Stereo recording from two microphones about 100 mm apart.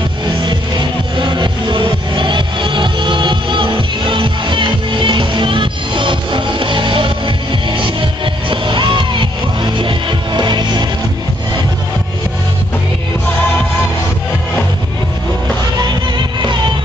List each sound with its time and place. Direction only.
0.4 s music: 50° right (ahead or behind)